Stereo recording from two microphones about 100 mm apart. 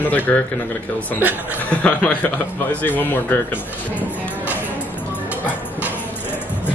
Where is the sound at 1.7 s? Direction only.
15° left (ahead or behind).